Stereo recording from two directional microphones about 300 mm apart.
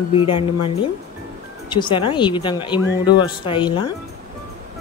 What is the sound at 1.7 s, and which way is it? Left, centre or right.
Speech, centre.